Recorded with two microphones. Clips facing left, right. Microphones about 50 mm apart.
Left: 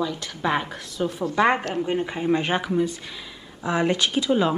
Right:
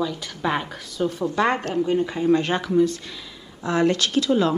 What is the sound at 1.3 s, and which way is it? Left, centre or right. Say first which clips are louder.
Speech: left 2 dB; centre.